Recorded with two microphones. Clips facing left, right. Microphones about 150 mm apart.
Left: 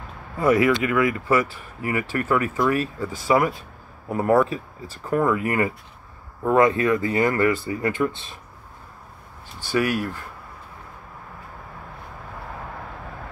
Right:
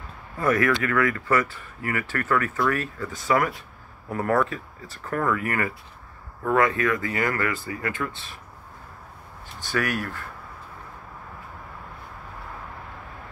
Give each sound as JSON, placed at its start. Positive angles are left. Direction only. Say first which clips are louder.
{"t": 0.4, "sound": "speech", "louder": "left 4 dB", "side_deg": 20}
{"t": 3.1, "sound": "speech", "louder": "left 3 dB", "side_deg": 30}
{"t": 9.6, "sound": "speech", "louder": "left 4 dB", "side_deg": 10}